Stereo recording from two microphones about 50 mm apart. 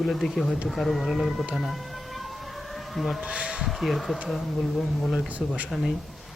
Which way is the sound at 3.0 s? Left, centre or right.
Centre.